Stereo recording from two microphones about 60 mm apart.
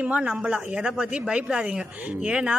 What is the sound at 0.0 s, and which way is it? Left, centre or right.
A man's voice, right.